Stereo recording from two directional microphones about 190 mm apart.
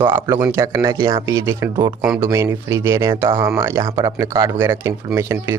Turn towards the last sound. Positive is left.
turn(degrees=-10)  # may be behind; listen again after turning